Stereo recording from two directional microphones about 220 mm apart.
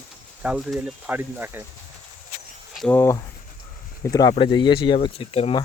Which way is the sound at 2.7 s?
5° left (ahead or behind).